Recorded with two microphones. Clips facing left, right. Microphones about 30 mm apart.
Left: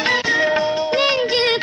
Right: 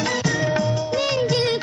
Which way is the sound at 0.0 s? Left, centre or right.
Left.